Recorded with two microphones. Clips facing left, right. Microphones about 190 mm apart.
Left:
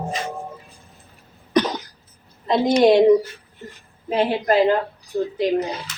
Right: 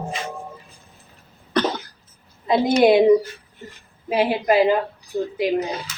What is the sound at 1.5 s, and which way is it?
Cough, 15° left (ahead or behind).